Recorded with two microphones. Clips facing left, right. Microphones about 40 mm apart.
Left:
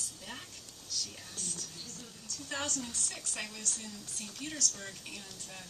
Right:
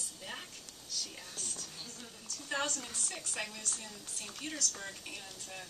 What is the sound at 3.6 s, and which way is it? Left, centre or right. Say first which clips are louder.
Speech: left 2 dB; right.